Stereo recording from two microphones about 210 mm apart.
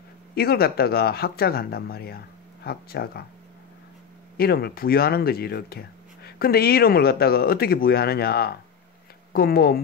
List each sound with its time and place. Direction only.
0.3 s speech: 45° left (ahead or behind)
4.4 s speech: 50° left (ahead or behind)